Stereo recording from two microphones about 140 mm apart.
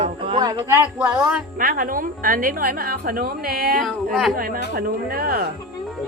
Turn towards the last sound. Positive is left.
turn(degrees=-90)